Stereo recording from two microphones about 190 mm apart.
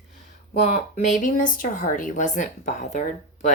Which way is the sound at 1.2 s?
45° left (ahead or behind).